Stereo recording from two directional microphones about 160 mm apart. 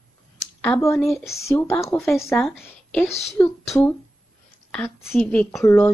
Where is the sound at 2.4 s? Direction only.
Centre (ahead or behind).